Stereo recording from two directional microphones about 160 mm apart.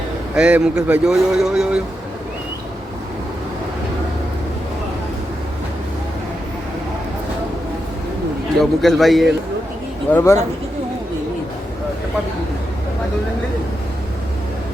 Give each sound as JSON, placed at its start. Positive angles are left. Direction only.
{"t": 0.3, "sound": "speech", "side_deg": -5}
{"t": 8.5, "sound": "speech", "side_deg": 0}
{"t": 10.1, "sound": "speech", "side_deg": 15}